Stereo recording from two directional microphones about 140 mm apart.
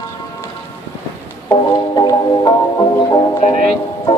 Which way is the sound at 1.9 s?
30° left (ahead or behind).